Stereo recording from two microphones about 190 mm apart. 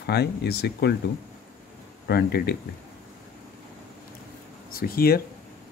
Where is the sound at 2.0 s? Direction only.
55° left (ahead or behind).